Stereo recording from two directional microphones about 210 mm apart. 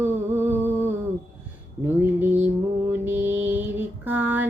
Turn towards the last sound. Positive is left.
turn(degrees=-10)  # may be behind; listen again after turning